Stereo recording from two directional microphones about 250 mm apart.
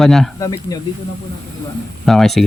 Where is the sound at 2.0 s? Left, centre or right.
Centre.